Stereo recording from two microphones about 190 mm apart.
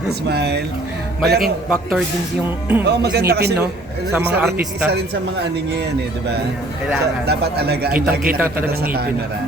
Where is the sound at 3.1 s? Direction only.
55° right (ahead or behind).